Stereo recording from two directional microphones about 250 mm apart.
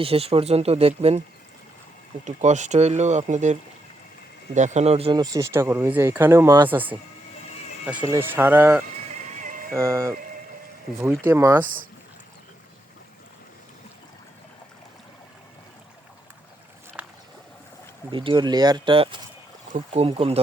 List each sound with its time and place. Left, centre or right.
0.0 s speech: right
2.2 s speech: right; by 6.9 s centre
7.9 s speech: centre
9.3 s music: right
9.7 s speech: centre
11.3 s speech: centre
11.6 s speech: right
17.0 s boat: centre
18.1 s speech: centre